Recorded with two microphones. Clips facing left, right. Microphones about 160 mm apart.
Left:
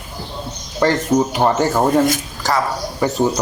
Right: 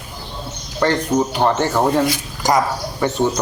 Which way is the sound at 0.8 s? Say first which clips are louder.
Left 2 dB; 5° left (ahead or behind).